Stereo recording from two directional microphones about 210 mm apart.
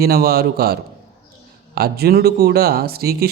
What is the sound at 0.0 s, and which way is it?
Speech, 45° right (ahead or behind).